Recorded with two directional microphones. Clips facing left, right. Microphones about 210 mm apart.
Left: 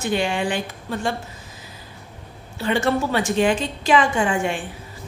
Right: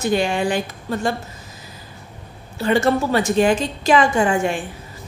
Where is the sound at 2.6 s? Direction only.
40° right (ahead or behind).